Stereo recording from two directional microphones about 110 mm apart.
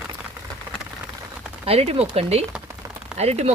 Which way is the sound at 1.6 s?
65° right (ahead or behind).